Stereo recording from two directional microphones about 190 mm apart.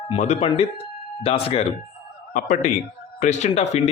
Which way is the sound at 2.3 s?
40° left (ahead or behind).